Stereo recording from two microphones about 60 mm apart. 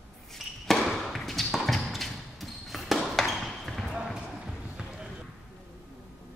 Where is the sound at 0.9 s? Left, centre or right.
Centre.